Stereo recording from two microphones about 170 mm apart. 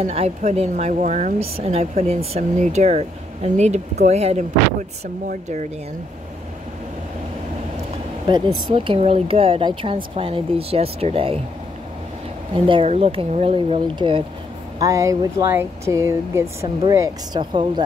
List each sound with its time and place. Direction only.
0.0 s speech: 35° right (ahead or behind)
8.3 s speech: 25° right (ahead or behind)
12.5 s speech: 30° right (ahead or behind)
14.8 s speech: 20° right (ahead or behind)